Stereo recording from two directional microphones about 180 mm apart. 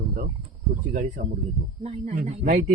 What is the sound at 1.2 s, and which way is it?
Speech, 55° right (ahead or behind).